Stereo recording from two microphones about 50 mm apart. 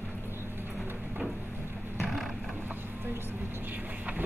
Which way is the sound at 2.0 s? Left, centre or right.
Centre.